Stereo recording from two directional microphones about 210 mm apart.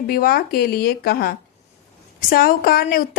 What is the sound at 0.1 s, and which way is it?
A woman's voice, 45° left (ahead or behind).